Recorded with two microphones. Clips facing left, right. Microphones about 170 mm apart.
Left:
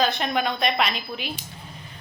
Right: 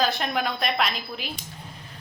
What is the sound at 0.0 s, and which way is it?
A woman's voice, centre (ahead or behind).